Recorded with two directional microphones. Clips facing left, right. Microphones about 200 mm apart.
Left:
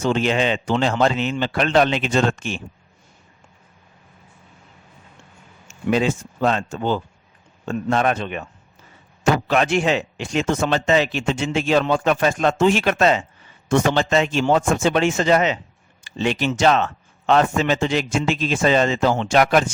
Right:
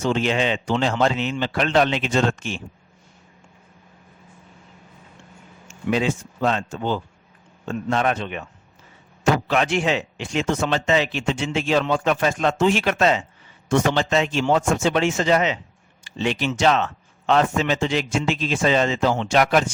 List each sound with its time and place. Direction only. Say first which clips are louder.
0.0 s a man's voice: left 2 dB; 50° left (ahead or behind)
5.9 s a man's voice: left 2 dB; 45° left (ahead or behind)
9.5 s a man's voice: left 2 dB; 45° left (ahead or behind)